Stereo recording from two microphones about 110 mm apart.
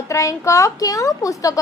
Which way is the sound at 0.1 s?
30° left (ahead or behind).